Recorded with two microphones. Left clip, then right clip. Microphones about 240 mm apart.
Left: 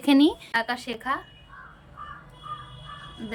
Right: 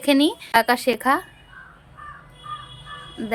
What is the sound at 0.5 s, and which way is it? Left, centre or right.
Speech, centre.